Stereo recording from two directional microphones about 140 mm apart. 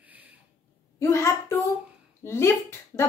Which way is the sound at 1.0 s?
20° left (ahead or behind).